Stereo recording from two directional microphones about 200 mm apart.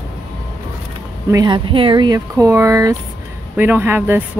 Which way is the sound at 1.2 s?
20° right (ahead or behind).